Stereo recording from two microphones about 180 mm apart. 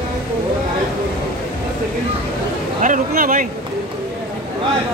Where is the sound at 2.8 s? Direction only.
45° right (ahead or behind).